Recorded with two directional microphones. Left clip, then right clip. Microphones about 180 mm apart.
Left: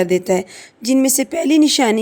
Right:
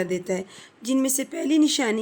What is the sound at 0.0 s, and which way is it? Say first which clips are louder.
Speech: left 10 dB; 40° left (ahead or behind).